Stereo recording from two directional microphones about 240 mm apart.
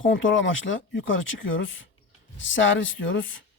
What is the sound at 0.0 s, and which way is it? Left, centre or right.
Speech, left.